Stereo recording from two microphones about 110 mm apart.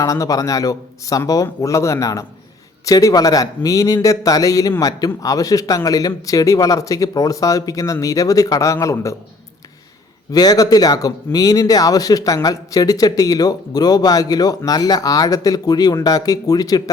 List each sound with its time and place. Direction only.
0.0 s speech: 30° left (ahead or behind)
10.3 s speech: 35° left (ahead or behind)